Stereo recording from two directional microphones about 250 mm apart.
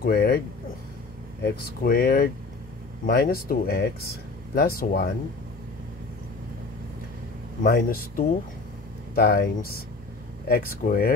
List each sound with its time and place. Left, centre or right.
0.0 s speech: left
1.4 s speech: left
7.6 s speech: left